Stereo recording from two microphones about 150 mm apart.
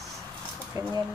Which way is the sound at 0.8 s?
25° right (ahead or behind).